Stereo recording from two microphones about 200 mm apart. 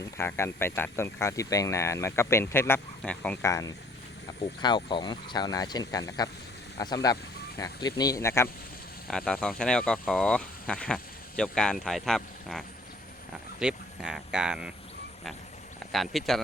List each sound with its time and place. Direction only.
0.0 s speech: 15° left (ahead or behind)
3.4 s speech: 15° left (ahead or behind)
9.0 s speech: 5° left (ahead or behind)
15.9 s speech: centre (ahead or behind)